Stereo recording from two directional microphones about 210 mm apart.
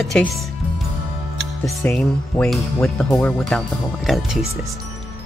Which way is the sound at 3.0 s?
15° left (ahead or behind).